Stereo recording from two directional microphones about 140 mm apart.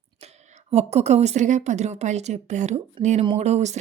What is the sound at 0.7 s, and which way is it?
A woman's voice, 50° right (ahead or behind).